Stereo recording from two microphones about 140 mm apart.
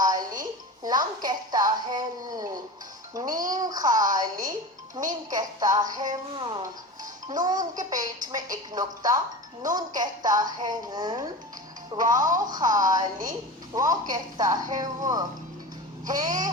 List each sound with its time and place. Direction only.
0.0 s music: 25° right (ahead or behind)
0.9 s a sound: 30° right (ahead or behind)
3.2 s a woman's voice: 25° right (ahead or behind)